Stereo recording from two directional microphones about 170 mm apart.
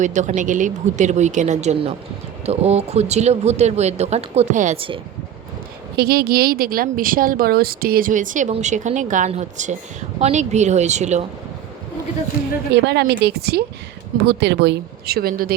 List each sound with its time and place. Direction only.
0.0 s speech: 45° right (ahead or behind)
6.0 s speech: 65° right (ahead or behind); by 11.2 s 40° right (ahead or behind)
12.8 s speech: 80° right
14.3 s speech: 90° right; by 15.5 s 60° right (ahead or behind)